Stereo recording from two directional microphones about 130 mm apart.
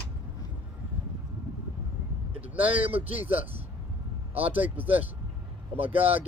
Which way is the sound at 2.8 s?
50° right (ahead or behind).